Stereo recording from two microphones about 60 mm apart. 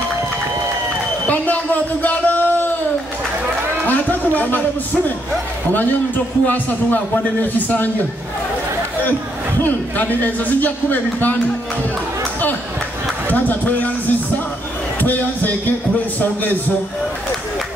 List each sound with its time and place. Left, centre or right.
1.2 s a sound: left
3.8 s a man's voice: left
9.6 s speech: left
13.3 s speech: left
15.0 s speech: left